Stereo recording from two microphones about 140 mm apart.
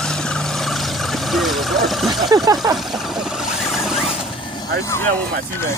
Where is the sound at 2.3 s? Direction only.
25° right (ahead or behind).